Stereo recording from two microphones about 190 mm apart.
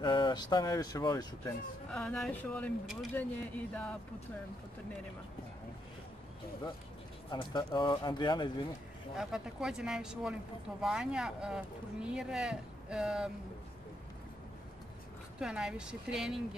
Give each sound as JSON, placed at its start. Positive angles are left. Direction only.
{"t": 0.0, "sound": "speech", "side_deg": 25}
{"t": 1.9, "sound": "speech", "side_deg": 5}
{"t": 7.2, "sound": "speech", "side_deg": 25}
{"t": 9.1, "sound": "speech", "side_deg": 0}
{"t": 15.3, "sound": "speech", "side_deg": -5}